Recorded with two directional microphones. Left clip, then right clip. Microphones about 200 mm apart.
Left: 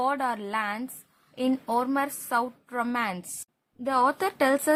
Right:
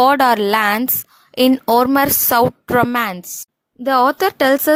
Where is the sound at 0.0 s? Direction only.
55° right (ahead or behind).